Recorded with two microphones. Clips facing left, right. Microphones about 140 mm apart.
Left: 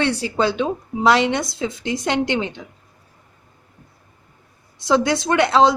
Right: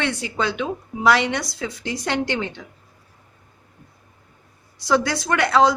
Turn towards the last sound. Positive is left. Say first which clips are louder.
# left 2 dB
turn(degrees=25)  # may be behind; listen again after turning